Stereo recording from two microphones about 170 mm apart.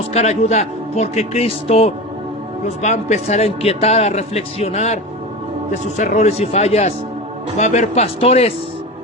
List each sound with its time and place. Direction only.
0.1 s a man's voice: 40° left (ahead or behind)
6.0 s a man's voice: 45° left (ahead or behind)